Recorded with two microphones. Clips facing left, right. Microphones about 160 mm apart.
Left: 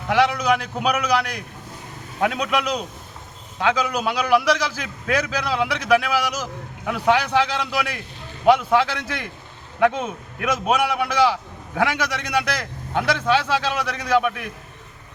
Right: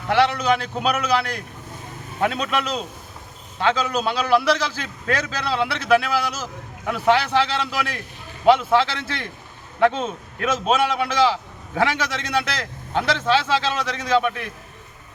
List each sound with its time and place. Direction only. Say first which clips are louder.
0.1 s a man's voice: even; 10° left (ahead or behind)